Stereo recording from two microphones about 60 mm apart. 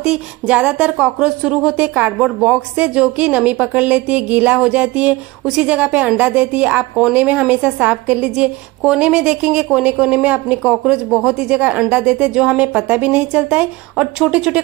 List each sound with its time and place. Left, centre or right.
0.0 s speech: centre
1.8 s a woman's voice: right